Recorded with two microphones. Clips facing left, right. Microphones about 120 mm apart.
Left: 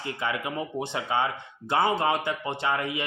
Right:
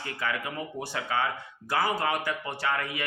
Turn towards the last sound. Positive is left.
turn(degrees=20)  # may be behind; listen again after turning